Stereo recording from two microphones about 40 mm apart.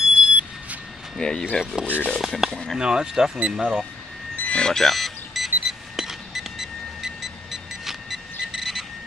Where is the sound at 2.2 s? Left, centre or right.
Centre.